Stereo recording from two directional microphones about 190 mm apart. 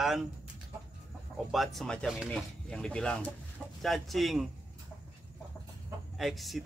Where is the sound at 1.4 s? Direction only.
Centre (ahead or behind).